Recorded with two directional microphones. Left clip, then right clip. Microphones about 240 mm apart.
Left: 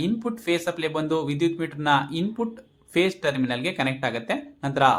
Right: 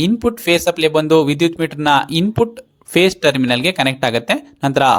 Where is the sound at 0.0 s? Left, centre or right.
Right.